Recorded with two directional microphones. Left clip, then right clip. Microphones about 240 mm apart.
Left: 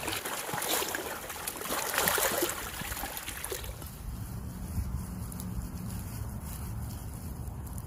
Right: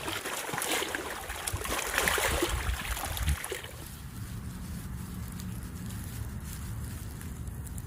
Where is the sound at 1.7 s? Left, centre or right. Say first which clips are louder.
Right 1 dB; centre.